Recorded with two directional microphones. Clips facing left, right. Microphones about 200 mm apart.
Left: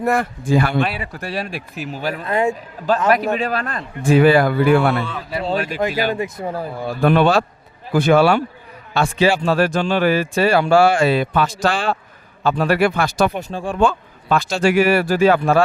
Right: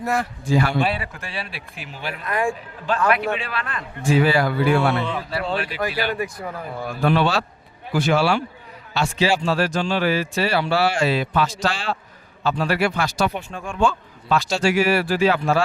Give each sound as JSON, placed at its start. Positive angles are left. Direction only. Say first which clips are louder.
{"t": 0.0, "sound": "speech", "louder": "left 5 dB", "side_deg": 55}
{"t": 1.1, "sound": "speech", "louder": "left 7 dB", "side_deg": 40}
{"t": 2.2, "sound": "speech", "louder": "left 4 dB", "side_deg": 25}
{"t": 3.1, "sound": "speech", "louder": "left 5 dB", "side_deg": 40}
{"t": 4.0, "sound": "speech", "louder": "left 6 dB", "side_deg": 55}
{"t": 5.5, "sound": "a man's voice", "louder": "left 7 dB", "side_deg": 45}
{"t": 6.1, "sound": "speech", "louder": "left 4 dB", "side_deg": 25}
{"t": 7.0, "sound": "a man's voice", "louder": "left 5 dB", "side_deg": 55}
{"t": 13.5, "sound": "speech", "louder": "left 7 dB", "side_deg": 30}
{"t": 13.7, "sound": "a man's voice", "louder": "left 2 dB", "side_deg": 55}